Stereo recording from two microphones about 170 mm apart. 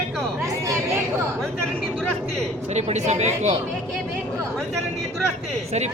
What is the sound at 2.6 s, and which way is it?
Speech, 40° right (ahead or behind).